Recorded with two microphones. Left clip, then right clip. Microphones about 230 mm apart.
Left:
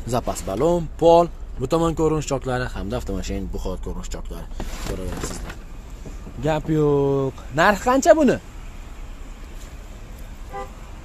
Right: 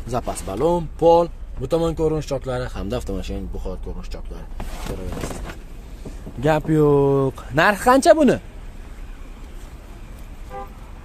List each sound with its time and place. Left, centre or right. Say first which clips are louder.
0.1 s speech: left 1 dB; centre
2.7 s speech: right 1 dB; centre
6.4 s speech: right 3 dB; centre